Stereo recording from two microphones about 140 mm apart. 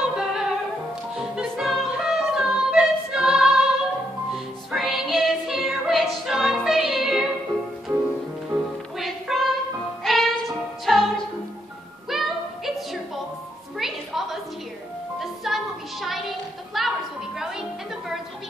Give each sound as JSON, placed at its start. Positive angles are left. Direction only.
{"t": 0.0, "sound": "music", "side_deg": -5}
{"t": 7.9, "sound": "music", "side_deg": -20}
{"t": 8.9, "sound": "music", "side_deg": 0}
{"t": 12.1, "sound": "music", "side_deg": 0}